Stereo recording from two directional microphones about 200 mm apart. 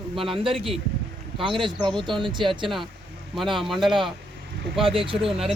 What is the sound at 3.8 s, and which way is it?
Speech, 25° right (ahead or behind).